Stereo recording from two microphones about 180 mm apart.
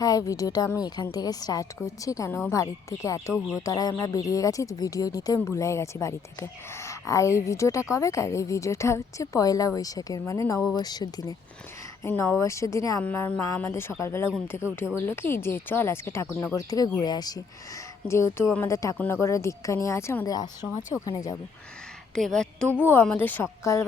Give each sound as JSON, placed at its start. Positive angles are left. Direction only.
{"t": 0.0, "sound": "a woman's voice", "side_deg": 20}
{"t": 3.3, "sound": "a woman's voice", "side_deg": 0}
{"t": 3.6, "sound": "a woman's voice", "side_deg": 20}
{"t": 22.1, "sound": "a woman's voice", "side_deg": 5}